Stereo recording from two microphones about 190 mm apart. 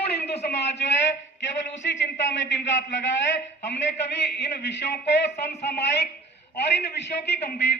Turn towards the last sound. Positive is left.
turn(degrees=60)  # may be behind; listen again after turning